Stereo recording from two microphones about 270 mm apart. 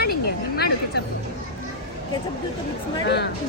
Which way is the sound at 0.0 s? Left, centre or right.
Left.